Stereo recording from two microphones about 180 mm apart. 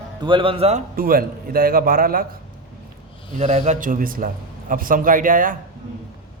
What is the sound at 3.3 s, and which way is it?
A man's voice, 40° right (ahead or behind).